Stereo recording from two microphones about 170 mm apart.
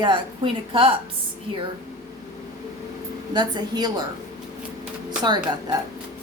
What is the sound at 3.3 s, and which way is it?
Speech, 25° right (ahead or behind).